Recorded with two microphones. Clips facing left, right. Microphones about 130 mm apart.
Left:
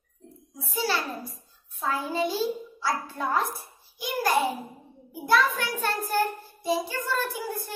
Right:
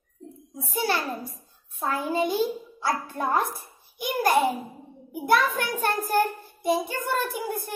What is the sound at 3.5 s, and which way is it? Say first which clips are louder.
Hands: right 2 dB; 55° right (ahead or behind).